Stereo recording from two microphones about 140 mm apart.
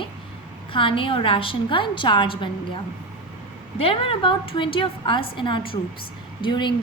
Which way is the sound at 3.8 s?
40° left (ahead or behind).